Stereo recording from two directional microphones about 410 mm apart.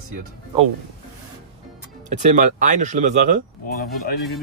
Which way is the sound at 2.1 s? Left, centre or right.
Centre.